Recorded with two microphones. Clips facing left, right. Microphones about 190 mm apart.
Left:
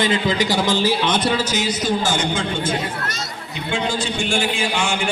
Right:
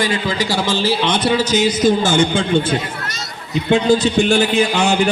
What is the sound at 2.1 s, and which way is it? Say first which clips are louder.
A man's voice: right 6 dB; 30° right (ahead or behind).